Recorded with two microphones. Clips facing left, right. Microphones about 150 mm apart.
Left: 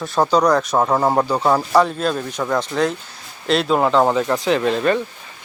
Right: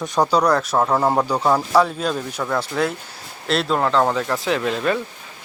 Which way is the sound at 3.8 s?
10° left (ahead or behind).